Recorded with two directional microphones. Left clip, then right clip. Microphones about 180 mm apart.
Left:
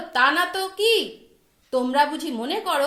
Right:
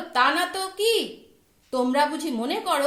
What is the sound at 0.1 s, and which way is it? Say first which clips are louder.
A woman's voice: left 2 dB; 55° left (ahead or behind).